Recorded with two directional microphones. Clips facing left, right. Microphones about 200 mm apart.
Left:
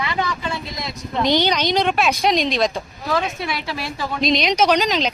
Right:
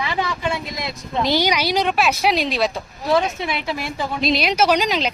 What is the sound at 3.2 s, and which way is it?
Speech, 20° right (ahead or behind).